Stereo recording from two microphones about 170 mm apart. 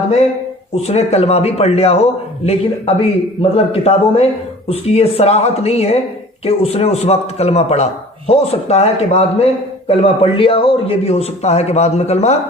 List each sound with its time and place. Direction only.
0.9 s a man's voice: 40° left (ahead or behind)